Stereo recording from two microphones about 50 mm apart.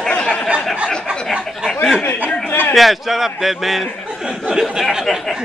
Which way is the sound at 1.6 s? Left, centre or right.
Right.